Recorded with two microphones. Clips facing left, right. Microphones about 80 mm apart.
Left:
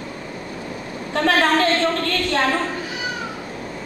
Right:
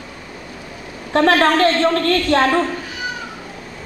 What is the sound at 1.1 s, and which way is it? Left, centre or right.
Speech, right.